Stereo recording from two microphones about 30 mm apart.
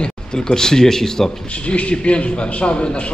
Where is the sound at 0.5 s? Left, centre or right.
Centre.